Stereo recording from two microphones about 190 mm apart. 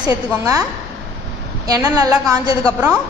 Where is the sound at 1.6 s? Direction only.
20° right (ahead or behind).